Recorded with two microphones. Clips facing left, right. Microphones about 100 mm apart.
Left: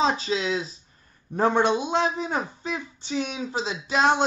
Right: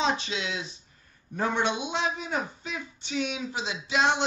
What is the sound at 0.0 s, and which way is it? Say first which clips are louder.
Speech: left 4 dB; 35° left (ahead or behind).